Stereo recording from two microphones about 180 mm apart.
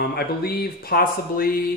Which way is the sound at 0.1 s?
60° left (ahead or behind).